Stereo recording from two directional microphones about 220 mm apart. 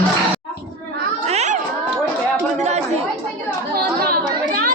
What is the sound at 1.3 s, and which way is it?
Cat, 30° right (ahead or behind).